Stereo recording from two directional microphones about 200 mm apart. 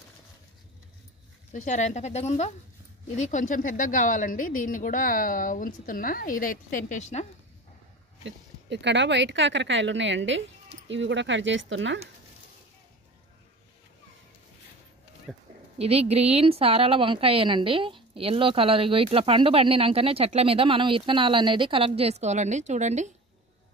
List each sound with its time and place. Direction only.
1.5 s a woman's voice: 40° left (ahead or behind)
8.2 s speech: 65° right (ahead or behind)
15.3 s speech: centre (ahead or behind)
15.8 s a woman's voice: 30° right (ahead or behind)